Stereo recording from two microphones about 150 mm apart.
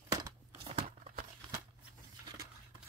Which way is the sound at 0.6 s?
45° right (ahead or behind).